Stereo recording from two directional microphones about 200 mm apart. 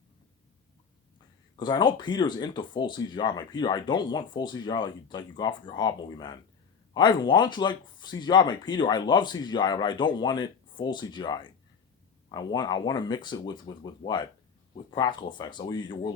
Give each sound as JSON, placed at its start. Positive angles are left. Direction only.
{"t": 1.5, "sound": "speech", "side_deg": 20}